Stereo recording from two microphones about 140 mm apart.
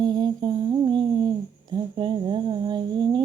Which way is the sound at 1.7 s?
35° right (ahead or behind).